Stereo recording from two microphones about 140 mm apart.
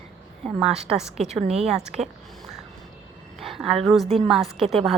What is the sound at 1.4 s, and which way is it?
Speech, 50° right (ahead or behind).